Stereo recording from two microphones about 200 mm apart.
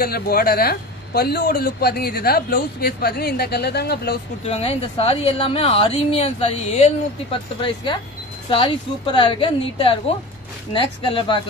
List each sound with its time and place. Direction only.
0.0 s speech: 50° left (ahead or behind)
4.5 s speech: 30° left (ahead or behind)